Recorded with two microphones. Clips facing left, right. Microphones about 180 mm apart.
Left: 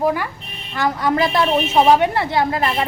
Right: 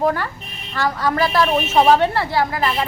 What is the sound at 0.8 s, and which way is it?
A woman's voice, 20° left (ahead or behind).